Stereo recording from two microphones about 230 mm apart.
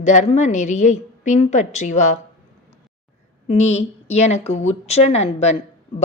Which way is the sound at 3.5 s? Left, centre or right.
Left.